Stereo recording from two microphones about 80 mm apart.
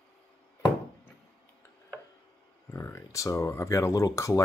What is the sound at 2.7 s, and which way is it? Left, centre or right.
Speech, left.